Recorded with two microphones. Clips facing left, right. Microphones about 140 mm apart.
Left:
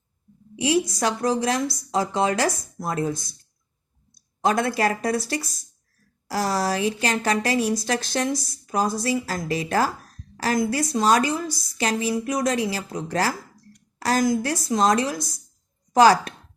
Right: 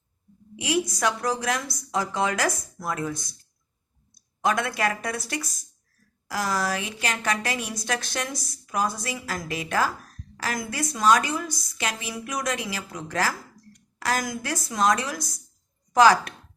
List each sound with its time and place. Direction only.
0.5 s a woman's voice: 30° left (ahead or behind)
4.4 s a woman's voice: 35° left (ahead or behind)